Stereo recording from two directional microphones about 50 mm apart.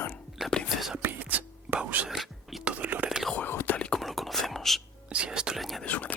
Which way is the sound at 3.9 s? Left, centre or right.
Centre.